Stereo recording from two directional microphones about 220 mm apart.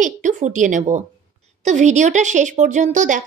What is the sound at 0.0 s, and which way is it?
A woman's voice, 35° right (ahead or behind).